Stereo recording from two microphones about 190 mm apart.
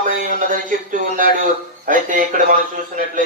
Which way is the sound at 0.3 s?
45° right (ahead or behind).